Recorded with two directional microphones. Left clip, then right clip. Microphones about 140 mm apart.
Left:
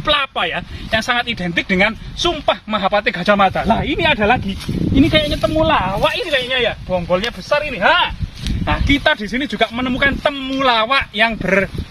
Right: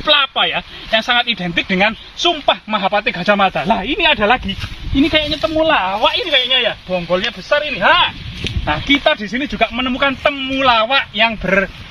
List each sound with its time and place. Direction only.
0.0 s speech: 30° left (ahead or behind)
3.7 s speech: 40° left (ahead or behind); by 11.7 s 15° left (ahead or behind)